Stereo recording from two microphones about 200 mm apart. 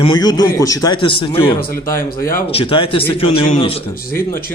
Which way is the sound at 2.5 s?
25° left (ahead or behind).